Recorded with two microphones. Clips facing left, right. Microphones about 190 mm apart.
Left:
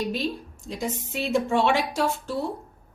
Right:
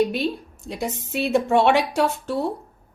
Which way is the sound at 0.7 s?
65° right (ahead or behind).